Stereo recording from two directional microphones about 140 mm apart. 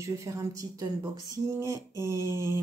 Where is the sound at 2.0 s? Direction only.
20° right (ahead or behind).